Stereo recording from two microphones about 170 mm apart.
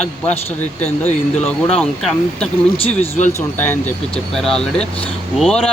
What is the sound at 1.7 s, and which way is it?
Speech, 5° left (ahead or behind).